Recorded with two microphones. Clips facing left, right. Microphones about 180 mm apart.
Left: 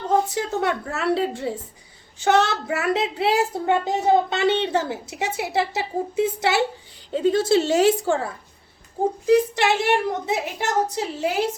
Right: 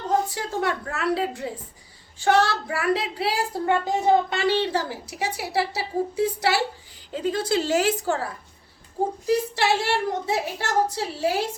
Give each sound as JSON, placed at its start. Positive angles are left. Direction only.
{"t": 0.3, "sound": "speech", "side_deg": 20}